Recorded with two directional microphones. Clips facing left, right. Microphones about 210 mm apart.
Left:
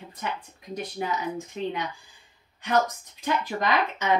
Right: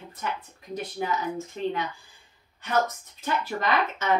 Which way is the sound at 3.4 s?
15° left (ahead or behind).